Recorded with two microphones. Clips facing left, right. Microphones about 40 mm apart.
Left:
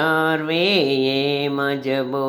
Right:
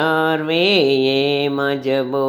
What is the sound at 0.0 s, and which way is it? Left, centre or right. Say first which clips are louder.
Mantra: right 2 dB; right.